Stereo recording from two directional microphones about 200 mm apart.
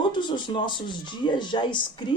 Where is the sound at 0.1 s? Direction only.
25° left (ahead or behind).